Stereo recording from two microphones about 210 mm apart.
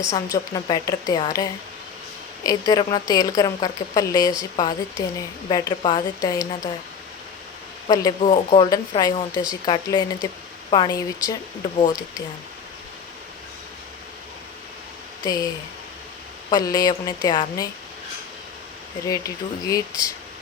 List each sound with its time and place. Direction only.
0.1 s a woman's voice: 20° left (ahead or behind)
8.2 s a woman's voice: 30° left (ahead or behind)
15.2 s speech: 20° left (ahead or behind)
16.5 s a woman's voice: 20° left (ahead or behind)
19.0 s a woman's voice: 15° left (ahead or behind)